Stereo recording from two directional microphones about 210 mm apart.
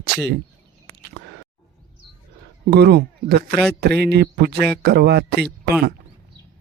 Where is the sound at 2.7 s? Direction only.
50° right (ahead or behind).